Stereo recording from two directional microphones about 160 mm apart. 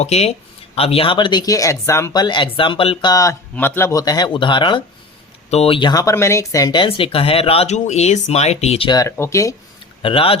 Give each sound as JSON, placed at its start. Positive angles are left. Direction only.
{"t": 0.0, "sound": "speech", "side_deg": 40}
{"t": 2.2, "sound": "speech", "side_deg": 30}
{"t": 8.9, "sound": "speech", "side_deg": 20}
{"t": 10.0, "sound": "speech", "side_deg": 35}